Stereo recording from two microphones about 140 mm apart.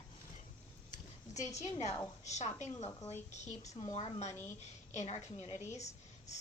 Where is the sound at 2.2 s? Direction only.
55° left (ahead or behind).